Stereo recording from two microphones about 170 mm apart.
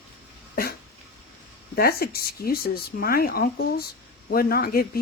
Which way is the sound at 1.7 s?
65° left (ahead or behind).